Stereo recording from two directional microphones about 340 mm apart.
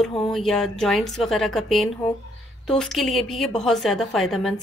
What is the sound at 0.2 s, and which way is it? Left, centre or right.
Speech, centre.